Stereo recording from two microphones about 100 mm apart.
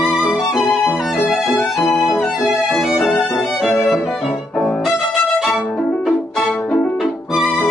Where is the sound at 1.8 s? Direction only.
30° left (ahead or behind).